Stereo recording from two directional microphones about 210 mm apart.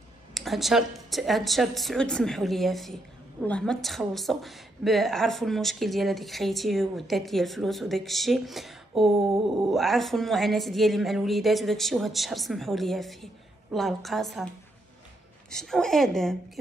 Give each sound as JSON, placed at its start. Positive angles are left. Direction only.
{"t": 0.3, "sound": "a woman's voice", "side_deg": 0}
{"t": 15.5, "sound": "a woman's voice", "side_deg": 0}